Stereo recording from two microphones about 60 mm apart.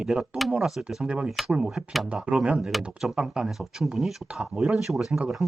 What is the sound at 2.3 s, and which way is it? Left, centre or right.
Speech, right.